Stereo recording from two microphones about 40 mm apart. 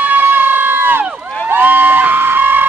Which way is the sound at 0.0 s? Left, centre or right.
Right.